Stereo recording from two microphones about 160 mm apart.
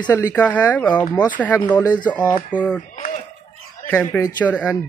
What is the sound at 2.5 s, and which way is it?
Speech, 10° right (ahead or behind).